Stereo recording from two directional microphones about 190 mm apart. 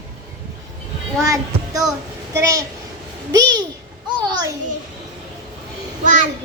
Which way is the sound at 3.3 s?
20° right (ahead or behind).